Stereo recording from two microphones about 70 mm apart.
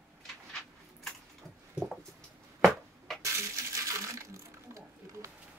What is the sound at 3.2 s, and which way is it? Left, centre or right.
Coin, right.